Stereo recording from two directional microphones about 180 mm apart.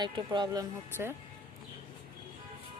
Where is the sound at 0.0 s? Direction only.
25° right (ahead or behind).